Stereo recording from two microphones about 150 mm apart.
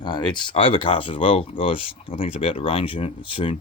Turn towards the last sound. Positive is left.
turn(degrees=35)  # may be behind; listen again after turning